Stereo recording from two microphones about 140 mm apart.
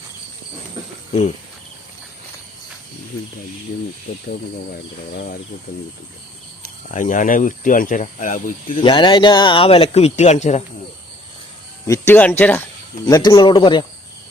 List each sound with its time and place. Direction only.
4.1 s speech: 55° left (ahead or behind)
6.8 s speech: 65° left (ahead or behind)
8.8 s speech: 35° left (ahead or behind); by 10.6 s 55° left (ahead or behind)
11.9 s speech: 15° left (ahead or behind)
13.1 s speech: 25° left (ahead or behind)